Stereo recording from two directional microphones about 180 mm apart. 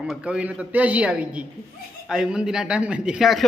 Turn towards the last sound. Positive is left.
turn(degrees=0)  # may be behind; listen again after turning